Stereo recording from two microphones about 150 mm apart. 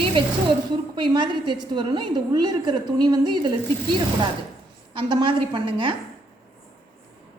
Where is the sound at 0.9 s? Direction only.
35° right (ahead or behind).